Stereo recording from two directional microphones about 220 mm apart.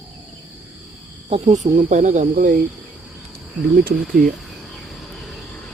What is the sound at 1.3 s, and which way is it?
Speech, 30° right (ahead or behind).